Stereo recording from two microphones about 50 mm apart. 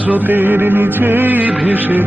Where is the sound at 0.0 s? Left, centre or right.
Right.